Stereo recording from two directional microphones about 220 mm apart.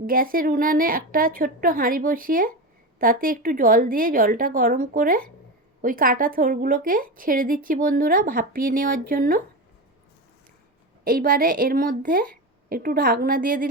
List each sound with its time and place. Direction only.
0.0 s a woman's voice: 40° right (ahead or behind)
11.0 s a woman's voice: 40° right (ahead or behind)